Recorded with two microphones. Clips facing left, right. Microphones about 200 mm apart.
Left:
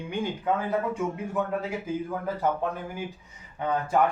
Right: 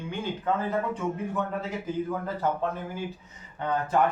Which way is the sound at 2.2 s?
10° left (ahead or behind).